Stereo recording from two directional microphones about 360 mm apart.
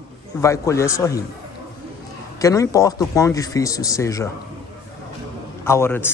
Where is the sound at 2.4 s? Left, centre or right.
Centre.